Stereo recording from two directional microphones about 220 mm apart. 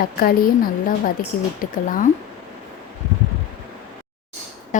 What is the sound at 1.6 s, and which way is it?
Speech, 40° left (ahead or behind).